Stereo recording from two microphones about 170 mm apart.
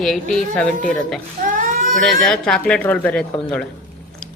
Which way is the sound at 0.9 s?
Centre (ahead or behind).